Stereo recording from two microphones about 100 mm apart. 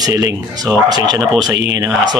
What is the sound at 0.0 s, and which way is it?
Speech, 35° right (ahead or behind).